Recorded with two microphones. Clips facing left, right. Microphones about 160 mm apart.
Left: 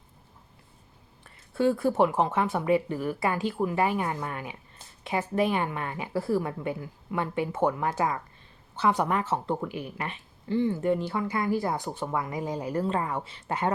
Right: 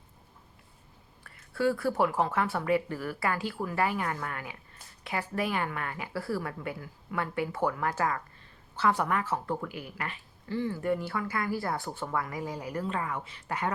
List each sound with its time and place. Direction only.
1.2 s speech: 20° left (ahead or behind)